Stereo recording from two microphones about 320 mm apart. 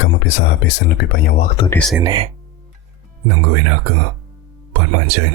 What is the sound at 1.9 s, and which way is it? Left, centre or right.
Speech, centre.